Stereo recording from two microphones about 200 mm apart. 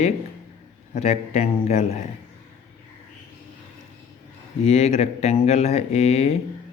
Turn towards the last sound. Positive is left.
turn(degrees=30)  # may be behind; listen again after turning